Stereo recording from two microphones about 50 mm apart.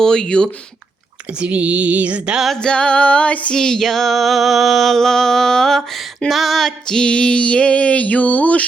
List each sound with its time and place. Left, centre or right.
0.0 s female singing: centre
1.3 s speech: right
2.6 s female singing: centre
3.5 s female singing: centre; by 8.6 s left